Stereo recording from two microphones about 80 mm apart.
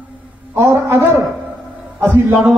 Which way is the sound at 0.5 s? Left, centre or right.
Right.